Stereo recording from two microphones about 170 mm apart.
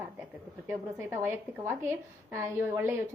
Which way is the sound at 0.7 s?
15° right (ahead or behind).